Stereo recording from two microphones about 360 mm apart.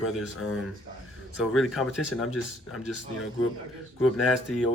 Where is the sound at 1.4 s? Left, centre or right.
Centre.